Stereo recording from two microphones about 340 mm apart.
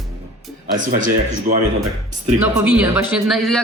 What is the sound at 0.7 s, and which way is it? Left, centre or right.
Speech, right.